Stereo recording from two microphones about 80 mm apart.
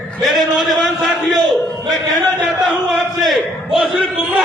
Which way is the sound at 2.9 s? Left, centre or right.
Centre.